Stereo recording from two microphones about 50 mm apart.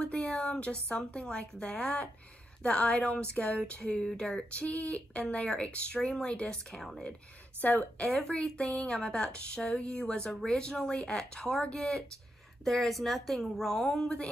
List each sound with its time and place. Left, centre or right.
0.0 s a sound: centre
0.4 s speech: left
6.7 s speech: centre
7.6 s speech: left
8.1 s speech: centre